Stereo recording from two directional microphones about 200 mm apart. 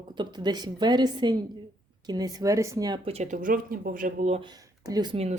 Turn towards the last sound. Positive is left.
turn(degrees=-30)  # may be behind; listen again after turning